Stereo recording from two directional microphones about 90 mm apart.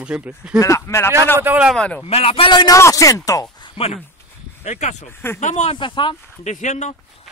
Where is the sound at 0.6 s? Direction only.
35° left (ahead or behind).